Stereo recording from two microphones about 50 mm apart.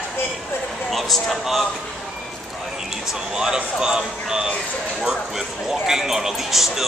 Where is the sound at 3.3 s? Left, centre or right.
Centre.